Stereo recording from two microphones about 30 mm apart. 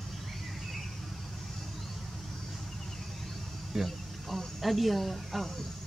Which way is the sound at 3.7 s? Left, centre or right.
Centre.